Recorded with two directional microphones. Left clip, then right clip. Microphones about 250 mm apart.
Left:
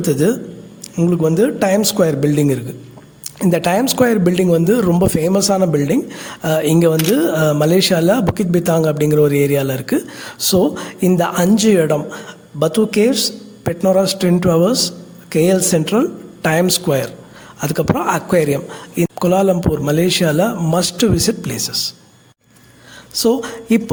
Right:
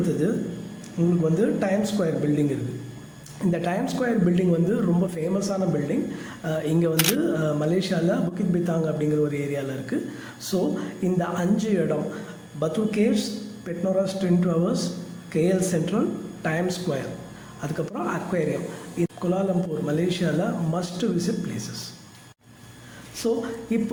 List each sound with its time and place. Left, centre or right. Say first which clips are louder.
0.2 s speech: left 9 dB; left
3.5 s speech: left 11 dB; left
6.9 s speech: left 8 dB; centre
7.2 s speech: left 10 dB; left
23.1 s speech: left 10 dB; left